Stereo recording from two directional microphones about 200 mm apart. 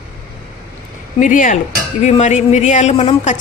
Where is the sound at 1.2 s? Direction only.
40° left (ahead or behind).